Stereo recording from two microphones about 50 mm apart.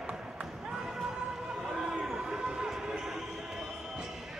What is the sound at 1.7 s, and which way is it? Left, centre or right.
Basketball bounce, centre.